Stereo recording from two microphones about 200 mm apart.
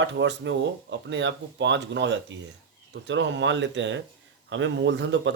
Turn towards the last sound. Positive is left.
turn(degrees=-65)  # may be behind; listen again after turning